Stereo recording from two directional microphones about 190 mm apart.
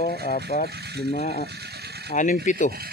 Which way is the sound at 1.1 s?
35° left (ahead or behind).